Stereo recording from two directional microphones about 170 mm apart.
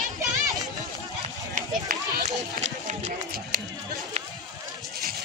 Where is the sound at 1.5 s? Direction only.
50° right (ahead or behind).